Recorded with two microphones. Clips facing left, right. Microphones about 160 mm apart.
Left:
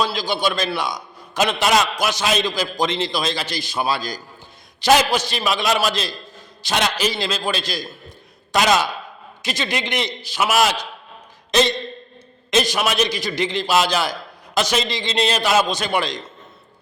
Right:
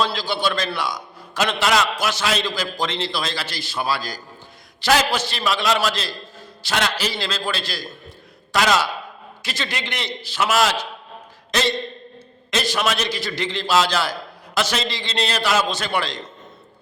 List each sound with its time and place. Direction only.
0.0 s a man's voice: 15° left (ahead or behind)
12.5 s a man's voice: 15° left (ahead or behind)